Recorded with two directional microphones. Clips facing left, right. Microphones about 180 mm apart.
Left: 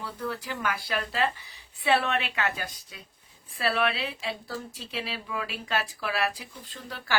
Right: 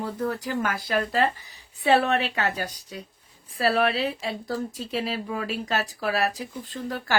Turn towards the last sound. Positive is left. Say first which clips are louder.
# right 6 dB
turn(degrees=-45)  # may be behind; listen again after turning